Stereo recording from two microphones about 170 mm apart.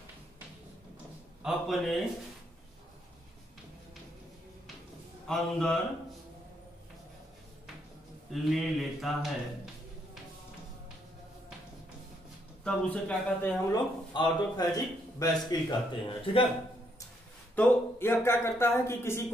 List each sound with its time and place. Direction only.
1.4 s speech: centre (ahead or behind)
5.3 s speech: 5° left (ahead or behind)
8.3 s speech: centre (ahead or behind)
12.6 s speech: 5° left (ahead or behind)
13.7 s a man's voice: 25° left (ahead or behind)
17.6 s speech: 10° left (ahead or behind)